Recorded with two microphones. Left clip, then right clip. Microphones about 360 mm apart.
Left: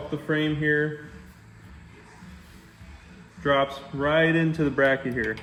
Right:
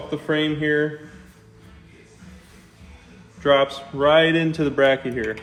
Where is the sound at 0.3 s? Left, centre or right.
Right.